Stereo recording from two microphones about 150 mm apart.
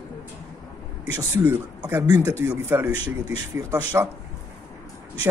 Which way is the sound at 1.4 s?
20° right (ahead or behind).